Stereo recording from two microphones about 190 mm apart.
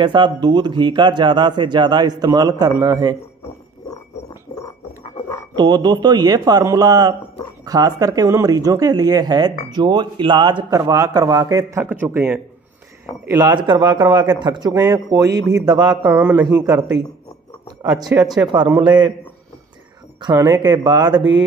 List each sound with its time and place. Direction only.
0.0 s speech: 25° right (ahead or behind)
5.6 s speech: 20° right (ahead or behind)
16.2 s speech: 10° right (ahead or behind)
18.1 s speech: 15° right (ahead or behind)
18.5 s speech: 25° right (ahead or behind)
20.2 s speech: 20° right (ahead or behind)